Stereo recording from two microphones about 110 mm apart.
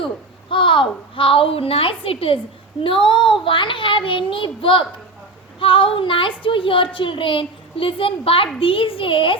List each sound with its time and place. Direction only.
0.5 s a woman's voice: 50° left (ahead or behind)